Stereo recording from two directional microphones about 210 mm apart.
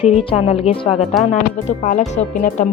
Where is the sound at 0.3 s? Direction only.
25° left (ahead or behind).